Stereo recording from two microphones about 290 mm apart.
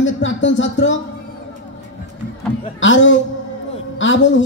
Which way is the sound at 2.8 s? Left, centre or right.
Left.